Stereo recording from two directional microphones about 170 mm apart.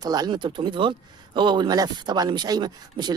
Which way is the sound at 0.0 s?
25° right (ahead or behind).